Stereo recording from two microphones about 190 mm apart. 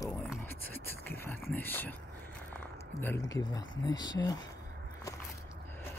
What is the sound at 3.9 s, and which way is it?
Speech, 20° left (ahead or behind).